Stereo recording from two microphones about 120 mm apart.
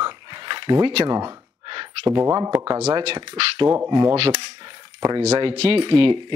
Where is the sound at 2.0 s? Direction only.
25° right (ahead or behind).